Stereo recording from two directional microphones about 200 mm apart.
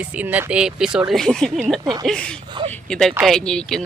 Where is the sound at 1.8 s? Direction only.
20° right (ahead or behind).